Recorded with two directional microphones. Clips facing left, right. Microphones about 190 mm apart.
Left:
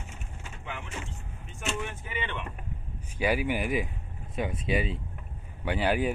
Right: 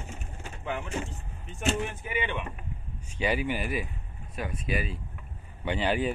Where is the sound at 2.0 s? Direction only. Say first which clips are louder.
Right 4 dB; 10° right (ahead or behind).